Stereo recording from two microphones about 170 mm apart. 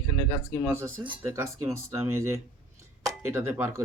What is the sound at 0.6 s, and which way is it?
Speech, 15° right (ahead or behind).